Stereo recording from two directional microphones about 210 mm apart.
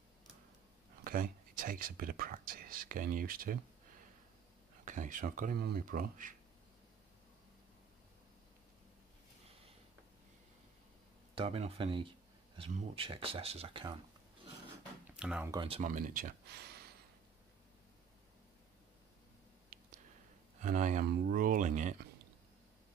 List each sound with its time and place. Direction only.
1.0 s speech: 40° right (ahead or behind)
4.8 s speech: 40° right (ahead or behind)
11.3 s speech: 25° right (ahead or behind)
15.0 s a sound: 5° right (ahead or behind)
15.5 s speech: 25° right (ahead or behind)
15.8 s speech: 40° right (ahead or behind)
19.7 s a sound: 50° right (ahead or behind)
20.6 s speech: 35° right (ahead or behind)